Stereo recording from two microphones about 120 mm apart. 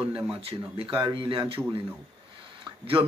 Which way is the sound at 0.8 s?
45° right (ahead or behind).